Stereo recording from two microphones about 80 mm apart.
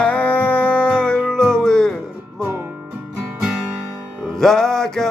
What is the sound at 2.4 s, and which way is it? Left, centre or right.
Music, right.